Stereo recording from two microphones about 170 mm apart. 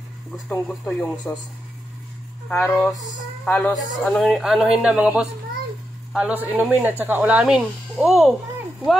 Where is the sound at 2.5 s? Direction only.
10° left (ahead or behind).